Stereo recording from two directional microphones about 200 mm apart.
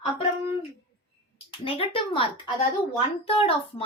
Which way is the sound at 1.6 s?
30° left (ahead or behind).